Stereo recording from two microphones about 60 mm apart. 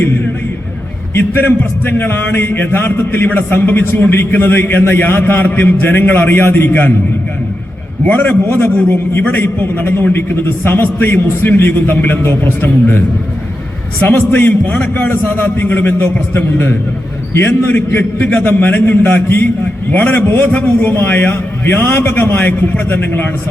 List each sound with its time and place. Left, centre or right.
1.2 s a man's voice: left
8.0 s a man's voice: left
8.7 s a man's voice: left
14.1 s a man's voice: left